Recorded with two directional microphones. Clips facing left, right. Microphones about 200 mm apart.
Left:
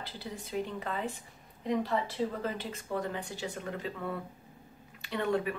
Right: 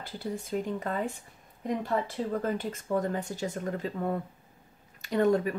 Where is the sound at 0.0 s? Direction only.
45° right (ahead or behind).